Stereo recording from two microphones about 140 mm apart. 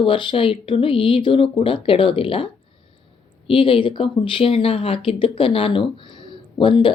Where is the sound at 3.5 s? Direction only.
35° left (ahead or behind).